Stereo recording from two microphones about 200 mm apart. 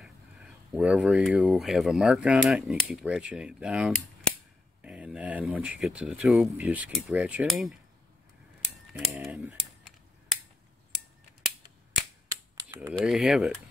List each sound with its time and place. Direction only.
0.0 s speech: 5° right (ahead or behind)
8.9 s computer keyboard: centre (ahead or behind)
12.5 s typing: 20° right (ahead or behind)
12.9 s speech: centre (ahead or behind)